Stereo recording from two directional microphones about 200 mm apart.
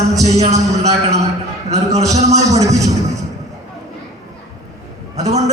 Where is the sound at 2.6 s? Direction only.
15° right (ahead or behind).